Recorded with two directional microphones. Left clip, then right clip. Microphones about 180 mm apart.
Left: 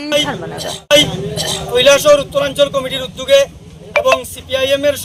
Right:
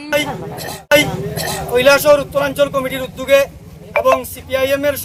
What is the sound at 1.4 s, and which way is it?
Speech, 35° right (ahead or behind).